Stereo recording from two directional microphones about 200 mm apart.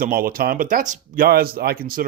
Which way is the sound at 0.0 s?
45° right (ahead or behind).